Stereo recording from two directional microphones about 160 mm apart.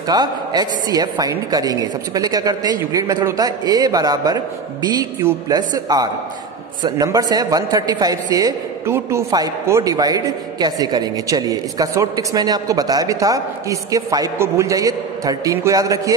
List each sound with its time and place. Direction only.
0.1 s a man's voice: 25° right (ahead or behind)
5.5 s a man's voice: 25° right (ahead or behind)